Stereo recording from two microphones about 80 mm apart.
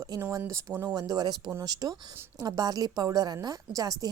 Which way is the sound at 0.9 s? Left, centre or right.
Right.